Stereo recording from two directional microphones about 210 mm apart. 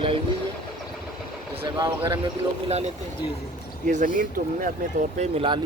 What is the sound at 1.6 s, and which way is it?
Speech, 15° right (ahead or behind).